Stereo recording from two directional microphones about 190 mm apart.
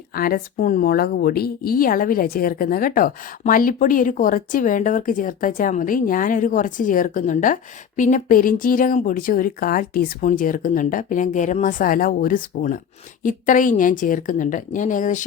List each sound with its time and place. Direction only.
0.2 s a woman's voice: 50° left (ahead or behind)